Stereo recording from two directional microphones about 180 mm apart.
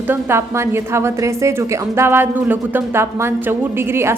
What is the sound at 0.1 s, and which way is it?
A woman's voice, 15° right (ahead or behind).